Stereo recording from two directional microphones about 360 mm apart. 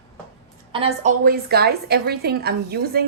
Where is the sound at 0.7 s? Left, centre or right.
Centre.